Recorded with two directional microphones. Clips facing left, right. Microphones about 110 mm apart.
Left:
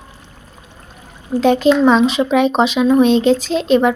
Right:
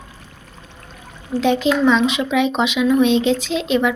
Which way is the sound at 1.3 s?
45° left (ahead or behind).